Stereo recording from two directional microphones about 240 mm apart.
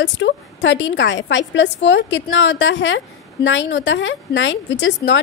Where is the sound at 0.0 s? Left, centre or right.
Left.